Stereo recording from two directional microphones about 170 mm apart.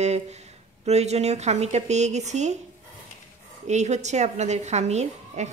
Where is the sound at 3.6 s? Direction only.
40° right (ahead or behind).